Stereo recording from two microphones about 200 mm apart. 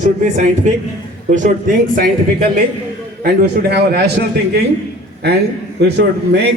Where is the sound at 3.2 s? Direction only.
50° right (ahead or behind).